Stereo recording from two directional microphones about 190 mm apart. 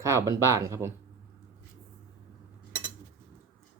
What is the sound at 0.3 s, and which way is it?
Speech, 15° right (ahead or behind).